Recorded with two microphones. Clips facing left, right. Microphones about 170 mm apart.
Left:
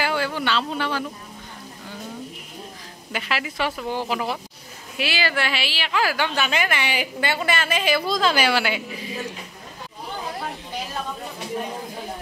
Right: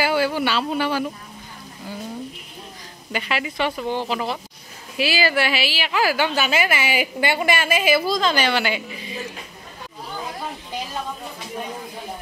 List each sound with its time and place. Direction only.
0.0 s speech: 10° right (ahead or behind)
3.1 s speech: centre (ahead or behind)
4.9 s a woman's voice: 5° right (ahead or behind)
8.2 s speech: 5° left (ahead or behind)